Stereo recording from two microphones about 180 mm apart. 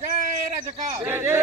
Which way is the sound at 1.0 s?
15° right (ahead or behind).